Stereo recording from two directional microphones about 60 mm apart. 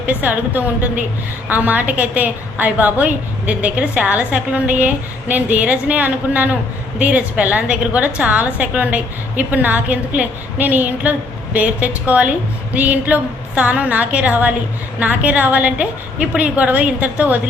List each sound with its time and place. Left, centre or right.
0.0 s a woman's voice: right